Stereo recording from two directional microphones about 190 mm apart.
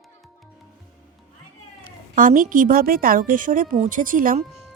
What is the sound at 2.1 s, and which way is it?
A woman's voice, 45° right (ahead or behind).